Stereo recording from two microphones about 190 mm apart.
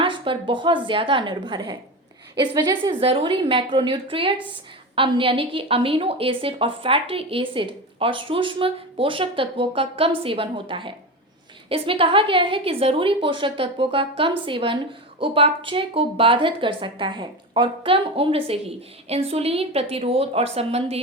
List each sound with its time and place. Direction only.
0.0 s a woman's voice: 25° right (ahead or behind)